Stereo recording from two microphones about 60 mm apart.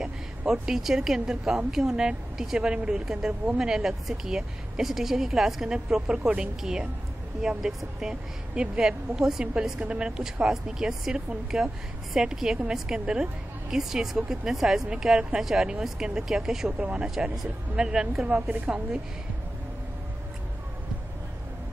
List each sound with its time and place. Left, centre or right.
0.5 s a woman's voice: centre